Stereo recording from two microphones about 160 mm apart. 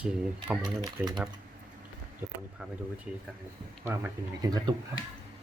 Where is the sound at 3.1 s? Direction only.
5° right (ahead or behind).